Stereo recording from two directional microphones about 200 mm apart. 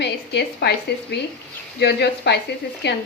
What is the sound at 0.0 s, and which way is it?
A woman's voice, 55° left (ahead or behind).